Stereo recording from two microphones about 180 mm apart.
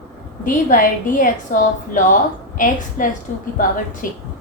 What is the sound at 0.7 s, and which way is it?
A woman's voice, 50° left (ahead or behind).